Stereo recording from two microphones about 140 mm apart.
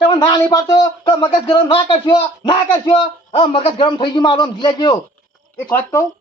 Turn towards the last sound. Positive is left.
turn(degrees=15)  # may be behind; listen again after turning